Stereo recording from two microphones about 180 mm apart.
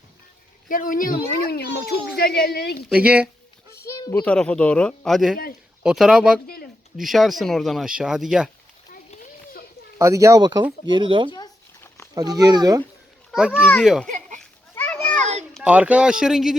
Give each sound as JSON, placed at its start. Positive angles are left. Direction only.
{"t": 0.7, "sound": "a woman's voice", "side_deg": 50}
{"t": 2.9, "sound": "speech", "side_deg": -5}
{"t": 3.8, "sound": "a sound", "side_deg": 20}
{"t": 4.2, "sound": "speech", "side_deg": 5}
{"t": 10.0, "sound": "speech", "side_deg": -15}
{"t": 13.3, "sound": "speech", "side_deg": -5}
{"t": 14.1, "sound": "a sound", "side_deg": -45}
{"t": 14.8, "sound": "children playing", "side_deg": 10}
{"t": 15.2, "sound": "a sound", "side_deg": -40}
{"t": 15.5, "sound": "speech", "side_deg": -5}